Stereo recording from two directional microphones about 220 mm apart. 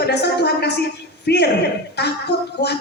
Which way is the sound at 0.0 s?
50° left (ahead or behind).